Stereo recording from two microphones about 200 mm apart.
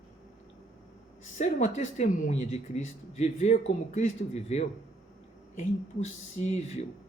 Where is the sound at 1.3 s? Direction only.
35° left (ahead or behind).